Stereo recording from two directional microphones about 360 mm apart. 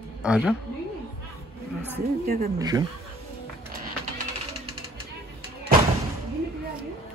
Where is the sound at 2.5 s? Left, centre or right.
Centre.